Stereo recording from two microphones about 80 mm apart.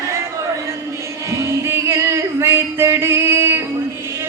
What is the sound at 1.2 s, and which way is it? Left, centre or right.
Music, right.